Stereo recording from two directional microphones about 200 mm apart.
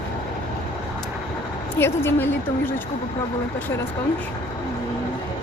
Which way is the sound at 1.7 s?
10° left (ahead or behind).